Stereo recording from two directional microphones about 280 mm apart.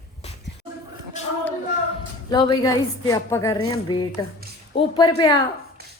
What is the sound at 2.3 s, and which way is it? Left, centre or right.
Speech, centre.